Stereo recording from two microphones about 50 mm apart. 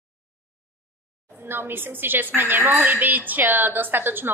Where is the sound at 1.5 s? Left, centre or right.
Right.